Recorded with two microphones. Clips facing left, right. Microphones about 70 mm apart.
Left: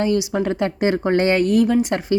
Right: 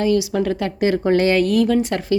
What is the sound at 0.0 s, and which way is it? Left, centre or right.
A woman's voice, left.